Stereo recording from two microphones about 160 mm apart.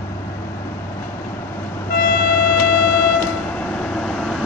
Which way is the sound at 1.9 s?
75° left (ahead or behind).